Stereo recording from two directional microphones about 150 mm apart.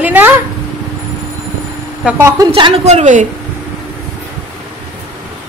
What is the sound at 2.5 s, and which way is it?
Speech, 35° right (ahead or behind).